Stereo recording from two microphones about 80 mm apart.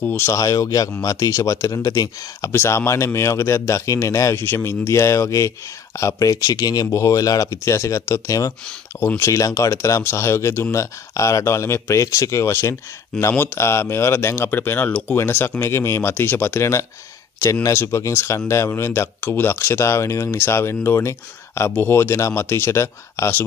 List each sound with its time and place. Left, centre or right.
0.0 s speech: left
0.3 s speech: left
2.5 s speech: left